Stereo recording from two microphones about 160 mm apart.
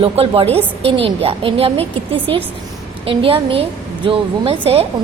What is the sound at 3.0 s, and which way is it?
A woman's voice, 35° right (ahead or behind).